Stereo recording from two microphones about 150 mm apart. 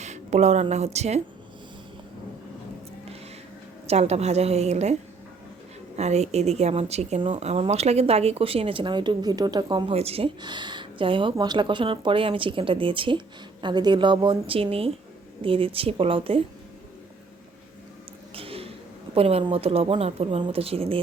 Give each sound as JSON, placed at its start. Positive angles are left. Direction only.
{"t": 0.0, "sound": "speech", "side_deg": -50}
{"t": 3.8, "sound": "speech", "side_deg": -45}
{"t": 6.0, "sound": "speech", "side_deg": -45}
{"t": 10.4, "sound": "speech", "side_deg": -30}
{"t": 18.3, "sound": "a sound", "side_deg": -40}
{"t": 19.1, "sound": "speech", "side_deg": -40}